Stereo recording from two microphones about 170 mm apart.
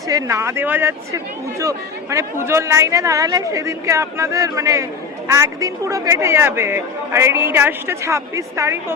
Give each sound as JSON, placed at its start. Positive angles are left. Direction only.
{"t": 0.1, "sound": "speech", "side_deg": -20}